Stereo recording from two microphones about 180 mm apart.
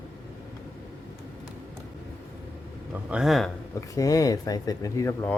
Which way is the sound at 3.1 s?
Centre (ahead or behind).